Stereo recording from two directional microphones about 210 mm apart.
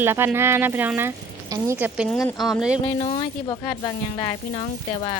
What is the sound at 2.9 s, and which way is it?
Speech, 25° left (ahead or behind).